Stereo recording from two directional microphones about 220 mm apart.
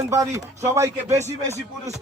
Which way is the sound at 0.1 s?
15° right (ahead or behind).